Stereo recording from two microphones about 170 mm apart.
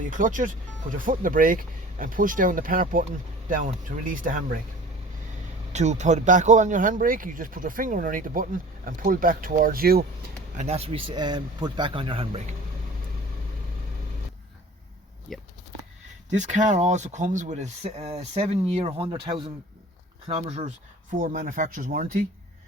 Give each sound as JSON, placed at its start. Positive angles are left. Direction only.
{"t": 0.0, "sound": "speech", "side_deg": -50}
{"t": 5.7, "sound": "speech", "side_deg": -40}
{"t": 10.6, "sound": "speech", "side_deg": -40}
{"t": 15.3, "sound": "speech", "side_deg": 0}
{"t": 16.3, "sound": "speech", "side_deg": -45}